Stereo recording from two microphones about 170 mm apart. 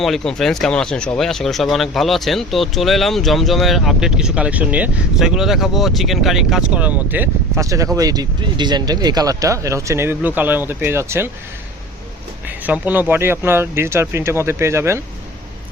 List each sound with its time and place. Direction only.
0.0 s speech: centre (ahead or behind); by 11.3 s 15° right (ahead or behind)
12.5 s speech: 10° right (ahead or behind)